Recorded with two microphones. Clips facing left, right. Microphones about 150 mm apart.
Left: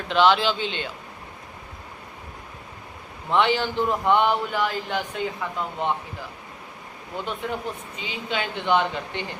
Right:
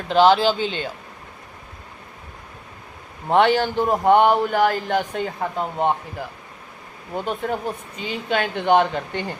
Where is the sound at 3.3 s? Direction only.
50° right (ahead or behind).